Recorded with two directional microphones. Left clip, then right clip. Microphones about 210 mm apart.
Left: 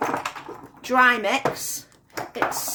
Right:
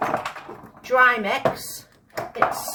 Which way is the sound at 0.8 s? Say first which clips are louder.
Right 1 dB; 50° left (ahead or behind).